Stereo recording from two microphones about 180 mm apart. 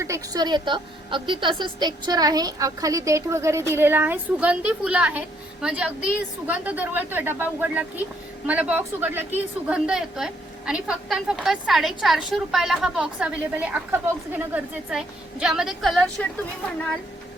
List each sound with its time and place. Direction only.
0.0 s a woman's voice: 20° right (ahead or behind); by 16.2 s centre (ahead or behind)